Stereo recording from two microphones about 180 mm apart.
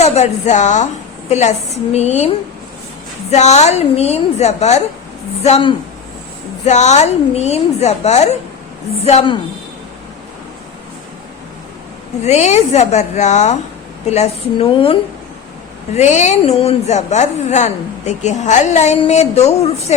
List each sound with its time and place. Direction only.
0.0 s a woman's voice: 40° left (ahead or behind)
12.2 s a woman's voice: 40° left (ahead or behind)
16.0 s a woman's voice: 40° left (ahead or behind)